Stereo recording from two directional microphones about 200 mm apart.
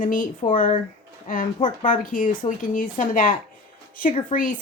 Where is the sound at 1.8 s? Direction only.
40° left (ahead or behind).